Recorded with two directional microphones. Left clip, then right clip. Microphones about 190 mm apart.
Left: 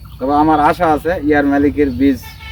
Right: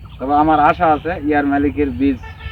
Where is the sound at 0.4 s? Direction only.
15° left (ahead or behind).